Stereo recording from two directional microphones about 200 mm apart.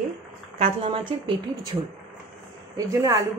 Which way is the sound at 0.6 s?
25° right (ahead or behind).